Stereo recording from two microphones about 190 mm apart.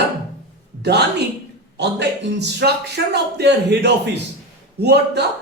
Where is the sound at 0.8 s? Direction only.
60° right (ahead or behind).